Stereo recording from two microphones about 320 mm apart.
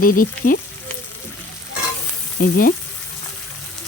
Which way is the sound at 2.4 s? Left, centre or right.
Left.